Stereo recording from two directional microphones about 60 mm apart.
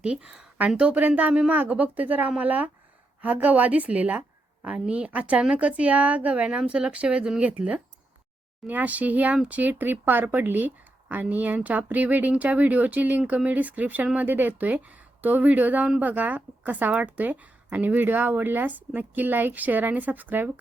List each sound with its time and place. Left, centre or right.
0.0 s speech: centre